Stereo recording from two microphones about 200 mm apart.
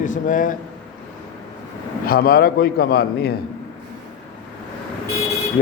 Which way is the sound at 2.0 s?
45° left (ahead or behind).